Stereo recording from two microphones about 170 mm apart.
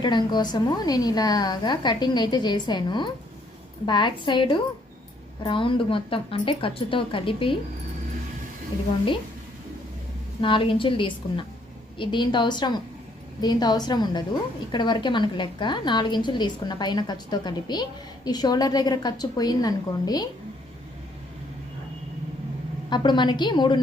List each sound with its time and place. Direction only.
0.0 s a woman's voice: 25° left (ahead or behind)
10.4 s a woman's voice: 30° left (ahead or behind)
22.9 s a woman's voice: 25° left (ahead or behind)